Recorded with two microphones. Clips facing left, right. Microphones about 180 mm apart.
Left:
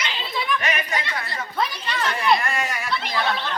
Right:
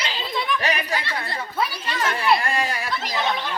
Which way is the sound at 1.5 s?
5° right (ahead or behind).